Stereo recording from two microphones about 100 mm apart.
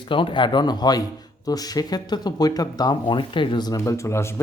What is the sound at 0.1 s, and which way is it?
Speech, 55° left (ahead or behind).